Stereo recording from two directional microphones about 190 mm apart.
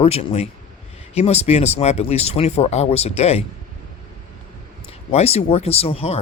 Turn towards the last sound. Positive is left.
turn(degrees=30)  # may be behind; listen again after turning